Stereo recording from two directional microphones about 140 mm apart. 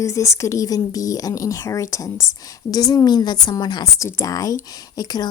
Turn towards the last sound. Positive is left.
turn(degrees=30)  # may be behind; listen again after turning